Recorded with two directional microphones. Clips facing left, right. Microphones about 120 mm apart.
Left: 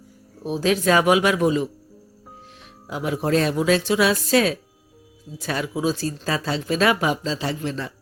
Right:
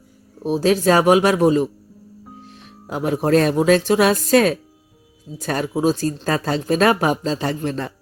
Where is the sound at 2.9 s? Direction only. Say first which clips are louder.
Right 5 dB; 45° right (ahead or behind).